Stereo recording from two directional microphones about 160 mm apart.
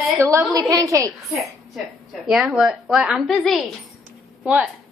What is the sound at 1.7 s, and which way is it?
A woman's voice, centre (ahead or behind).